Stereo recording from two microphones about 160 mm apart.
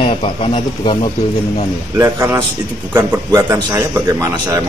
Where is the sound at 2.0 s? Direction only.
20° right (ahead or behind).